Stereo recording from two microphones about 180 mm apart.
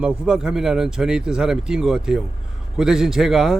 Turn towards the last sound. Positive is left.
turn(degrees=0)  # may be behind; listen again after turning